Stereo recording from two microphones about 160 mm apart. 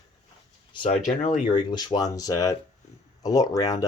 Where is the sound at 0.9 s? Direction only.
50° left (ahead or behind).